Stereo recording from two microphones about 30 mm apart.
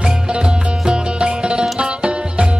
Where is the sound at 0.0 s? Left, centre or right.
Right.